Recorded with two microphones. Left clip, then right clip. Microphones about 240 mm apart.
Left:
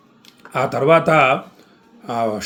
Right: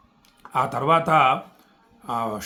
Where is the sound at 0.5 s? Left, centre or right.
Centre.